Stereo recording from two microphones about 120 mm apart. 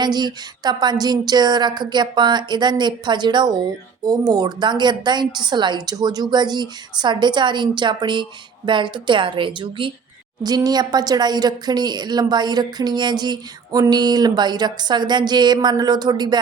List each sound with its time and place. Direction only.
0.0 s a woman's voice: 35° right (ahead or behind)